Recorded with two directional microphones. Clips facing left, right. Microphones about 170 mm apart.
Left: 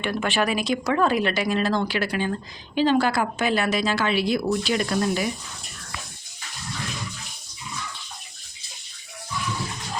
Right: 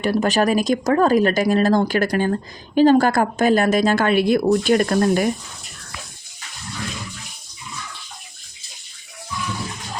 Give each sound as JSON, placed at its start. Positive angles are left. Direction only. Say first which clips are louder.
{"t": 0.0, "sound": "speech", "louder": "right 6 dB", "side_deg": -40}